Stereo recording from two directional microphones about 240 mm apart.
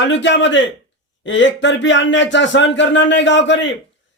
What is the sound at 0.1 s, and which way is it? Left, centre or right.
Speech, left.